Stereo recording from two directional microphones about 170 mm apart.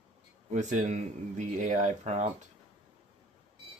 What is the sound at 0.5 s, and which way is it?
Speech, 45° right (ahead or behind).